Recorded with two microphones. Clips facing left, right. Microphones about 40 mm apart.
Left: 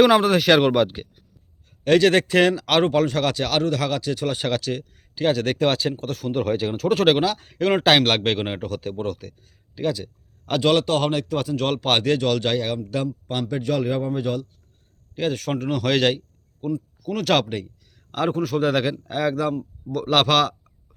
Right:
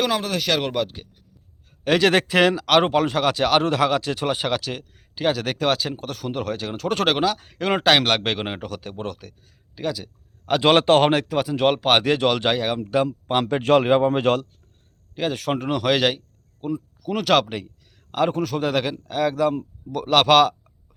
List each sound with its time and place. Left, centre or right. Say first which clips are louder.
0.1 s speech: left 7 dB; centre
1.8 s speech: left 2 dB; centre; by 4.4 s right
4.4 s speech: left 1 dB; centre
10.6 s speech: right 4 dB; right
11.3 s speech: right 3 dB; centre
13.5 s speech: right 7 dB; right
14.1 s speech: right 5 dB; right
15.1 s a man's voice: even; centre